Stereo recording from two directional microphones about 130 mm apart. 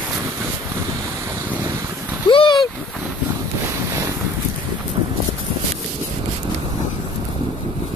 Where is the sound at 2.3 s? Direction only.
40° left (ahead or behind).